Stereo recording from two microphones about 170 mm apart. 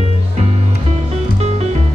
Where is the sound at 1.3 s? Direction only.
40° right (ahead or behind).